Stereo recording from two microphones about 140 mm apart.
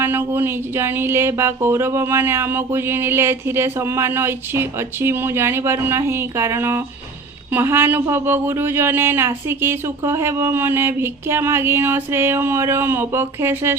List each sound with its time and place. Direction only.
0.0 s speech: 15° right (ahead or behind)